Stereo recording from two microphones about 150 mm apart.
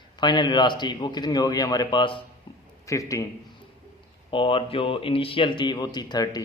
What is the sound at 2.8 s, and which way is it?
Speech, 20° left (ahead or behind).